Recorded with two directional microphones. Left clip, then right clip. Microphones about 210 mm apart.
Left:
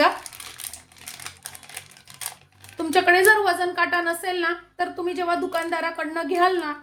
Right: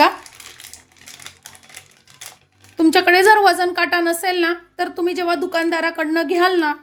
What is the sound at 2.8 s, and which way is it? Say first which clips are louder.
A woman's voice: right 5 dB; 50° right (ahead or behind).